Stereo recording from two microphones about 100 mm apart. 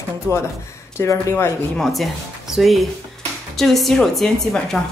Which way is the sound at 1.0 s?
30° left (ahead or behind).